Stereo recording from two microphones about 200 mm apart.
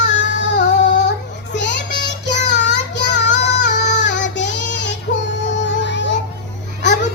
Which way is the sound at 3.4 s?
60° left (ahead or behind).